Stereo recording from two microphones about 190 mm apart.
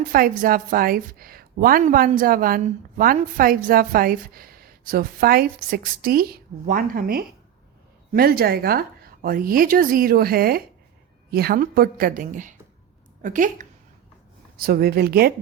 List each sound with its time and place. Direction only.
0.0 s a woman's voice: 50° right (ahead or behind)
14.6 s a woman's voice: 50° right (ahead or behind)